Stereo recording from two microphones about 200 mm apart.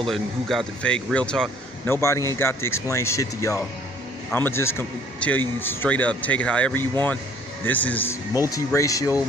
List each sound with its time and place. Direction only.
0.1 s speech: centre (ahead or behind); by 9.2 s 15° left (ahead or behind)